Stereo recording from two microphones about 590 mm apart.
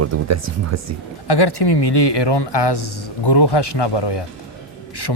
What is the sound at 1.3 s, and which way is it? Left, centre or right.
Speech, left.